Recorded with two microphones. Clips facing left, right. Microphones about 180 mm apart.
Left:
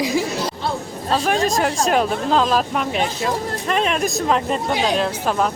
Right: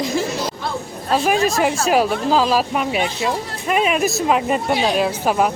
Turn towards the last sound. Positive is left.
turn(degrees=-10)  # may be behind; listen again after turning